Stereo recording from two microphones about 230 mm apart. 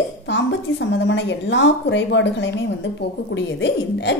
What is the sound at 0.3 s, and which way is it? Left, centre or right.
A woman's voice, left.